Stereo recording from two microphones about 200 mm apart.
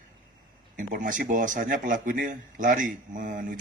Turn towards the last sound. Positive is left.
turn(degrees=-40)  # may be behind; listen again after turning